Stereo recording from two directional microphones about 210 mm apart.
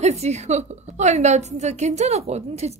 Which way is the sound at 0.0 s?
30° right (ahead or behind).